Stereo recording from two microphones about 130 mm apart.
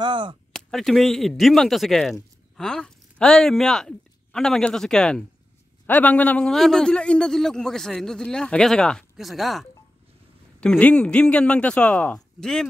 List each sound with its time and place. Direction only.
0.0 s speech: 40° right (ahead or behind)
0.5 s a man's voice: centre (ahead or behind)